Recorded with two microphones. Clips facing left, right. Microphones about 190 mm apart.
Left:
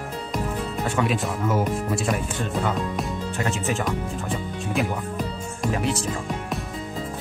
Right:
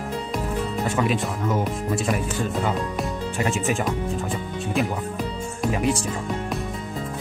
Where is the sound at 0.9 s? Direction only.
Centre (ahead or behind).